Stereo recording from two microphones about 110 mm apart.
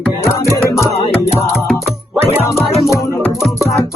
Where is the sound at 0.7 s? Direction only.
25° left (ahead or behind).